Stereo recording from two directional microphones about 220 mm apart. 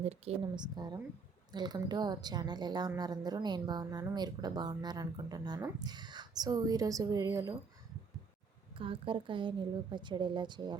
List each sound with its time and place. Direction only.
0.0 s a woman's voice: 30° right (ahead or behind)
8.8 s a woman's voice: 25° right (ahead or behind)